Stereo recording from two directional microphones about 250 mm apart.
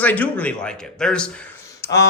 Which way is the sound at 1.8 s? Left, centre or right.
Centre.